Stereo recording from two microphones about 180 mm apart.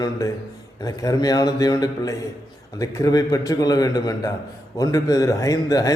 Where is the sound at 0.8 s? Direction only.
20° left (ahead or behind).